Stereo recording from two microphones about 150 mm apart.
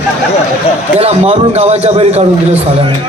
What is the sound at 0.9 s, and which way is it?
Speech, 45° right (ahead or behind).